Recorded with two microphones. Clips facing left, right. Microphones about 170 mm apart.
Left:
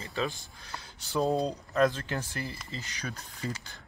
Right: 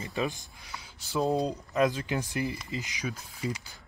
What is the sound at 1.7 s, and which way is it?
Speech, 15° right (ahead or behind).